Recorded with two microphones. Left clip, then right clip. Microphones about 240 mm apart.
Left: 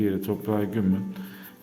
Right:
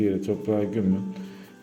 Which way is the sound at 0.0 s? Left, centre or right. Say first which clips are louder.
Right 2 dB; centre.